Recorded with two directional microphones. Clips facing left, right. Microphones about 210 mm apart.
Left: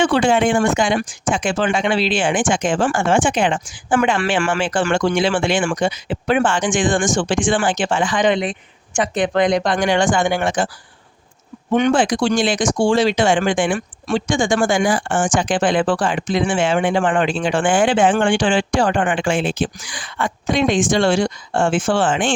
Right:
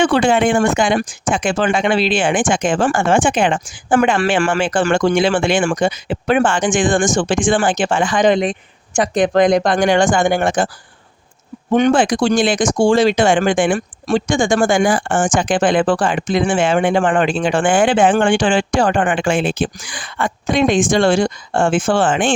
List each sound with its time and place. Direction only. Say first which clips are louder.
0.0 s speech: right 2 dB; 55° right (ahead or behind)
11.7 s speech: right 3 dB; 40° right (ahead or behind)
11.9 s speech: right 2 dB; 50° right (ahead or behind)